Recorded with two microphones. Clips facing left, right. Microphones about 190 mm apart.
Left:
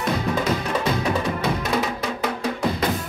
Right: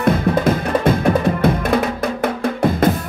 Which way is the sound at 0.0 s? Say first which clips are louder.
Right 7 dB; 55° right (ahead or behind).